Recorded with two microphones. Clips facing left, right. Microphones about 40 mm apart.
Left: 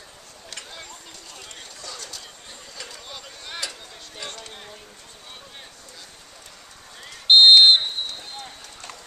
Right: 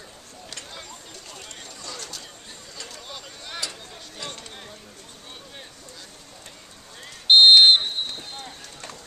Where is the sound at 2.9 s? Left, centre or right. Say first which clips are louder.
Even; centre.